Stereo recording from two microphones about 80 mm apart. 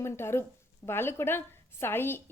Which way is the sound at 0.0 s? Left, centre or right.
Left.